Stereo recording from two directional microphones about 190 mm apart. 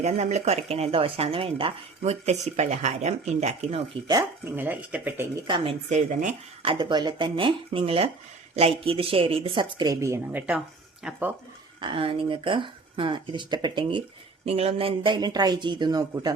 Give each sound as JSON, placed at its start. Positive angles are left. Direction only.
{"t": 0.0, "sound": "speech", "side_deg": -35}
{"t": 4.1, "sound": "speech", "side_deg": -15}
{"t": 5.5, "sound": "speech", "side_deg": -25}
{"t": 5.9, "sound": "speech", "side_deg": -40}
{"t": 6.6, "sound": "speech", "side_deg": -25}
{"t": 11.8, "sound": "speech", "side_deg": -25}